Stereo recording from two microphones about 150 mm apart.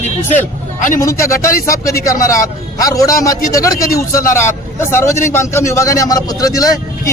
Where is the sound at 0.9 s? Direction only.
20° left (ahead or behind).